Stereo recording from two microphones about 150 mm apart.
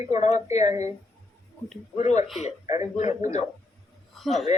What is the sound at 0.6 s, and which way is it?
Speech, 20° right (ahead or behind).